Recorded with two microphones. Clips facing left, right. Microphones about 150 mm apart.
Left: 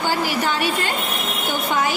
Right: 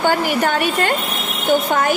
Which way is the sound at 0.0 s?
55° right (ahead or behind).